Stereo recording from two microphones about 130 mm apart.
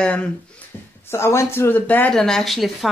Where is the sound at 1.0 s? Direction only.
20° left (ahead or behind); by 2.9 s centre (ahead or behind).